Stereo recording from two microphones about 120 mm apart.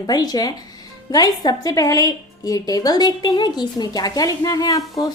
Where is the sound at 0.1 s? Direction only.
35° left (ahead or behind).